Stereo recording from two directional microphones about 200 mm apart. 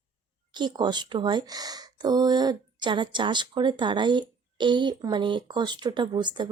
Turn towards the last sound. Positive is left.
turn(degrees=-20)  # may be behind; listen again after turning